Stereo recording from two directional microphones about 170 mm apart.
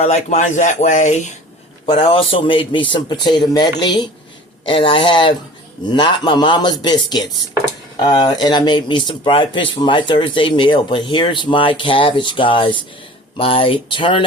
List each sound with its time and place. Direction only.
0.0 s speech: 40° left (ahead or behind)
1.9 s speech: 30° left (ahead or behind)